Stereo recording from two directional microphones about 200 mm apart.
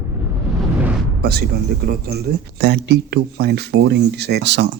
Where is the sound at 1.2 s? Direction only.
50° right (ahead or behind).